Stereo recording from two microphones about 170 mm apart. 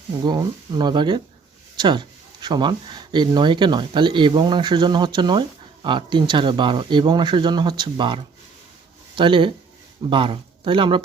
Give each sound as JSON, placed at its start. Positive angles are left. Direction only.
{"t": 0.3, "sound": "speech", "side_deg": -25}